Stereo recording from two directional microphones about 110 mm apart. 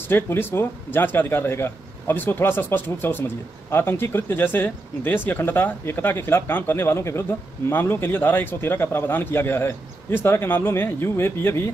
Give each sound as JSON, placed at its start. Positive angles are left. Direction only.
{"t": 0.1, "sound": "speech", "side_deg": 20}